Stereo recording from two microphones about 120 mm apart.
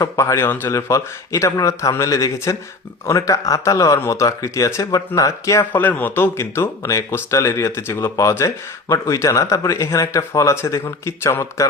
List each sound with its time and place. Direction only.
0.0 s speech: 25° left (ahead or behind)
5.7 s speech: 15° left (ahead or behind)